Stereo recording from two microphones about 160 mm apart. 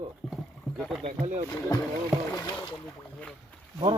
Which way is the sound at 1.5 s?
20° left (ahead or behind).